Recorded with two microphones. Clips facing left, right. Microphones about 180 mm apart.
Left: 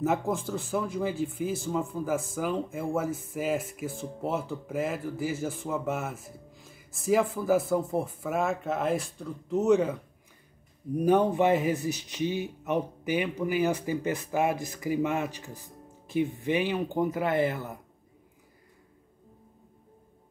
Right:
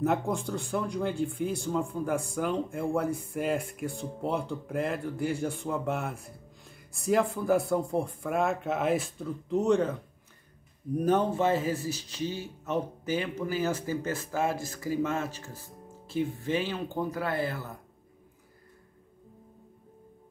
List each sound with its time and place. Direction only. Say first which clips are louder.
0.0 s speech: even; centre (ahead or behind)
11.0 s speech: left 3 dB; 10° left (ahead or behind)